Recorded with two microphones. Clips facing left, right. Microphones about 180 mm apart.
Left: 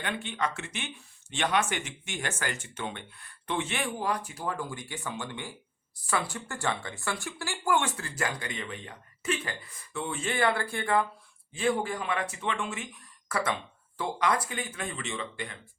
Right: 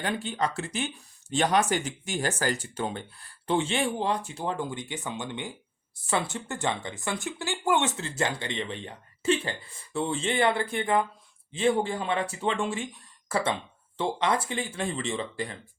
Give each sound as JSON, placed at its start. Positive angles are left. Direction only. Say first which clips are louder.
{"t": 0.0, "sound": "speech", "louder": "right 3 dB", "side_deg": -35}